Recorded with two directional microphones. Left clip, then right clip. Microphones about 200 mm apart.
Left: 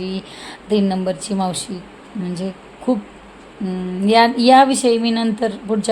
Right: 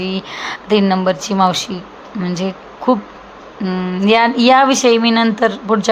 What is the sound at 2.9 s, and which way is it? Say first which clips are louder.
Speech: right 6 dB; 20° right (ahead or behind).